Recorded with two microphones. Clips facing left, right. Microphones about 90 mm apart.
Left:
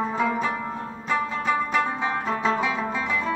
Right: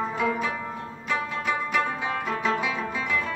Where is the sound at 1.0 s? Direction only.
35° left (ahead or behind).